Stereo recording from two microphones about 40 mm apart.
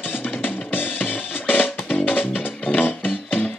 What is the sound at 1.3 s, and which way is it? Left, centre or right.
Music, left.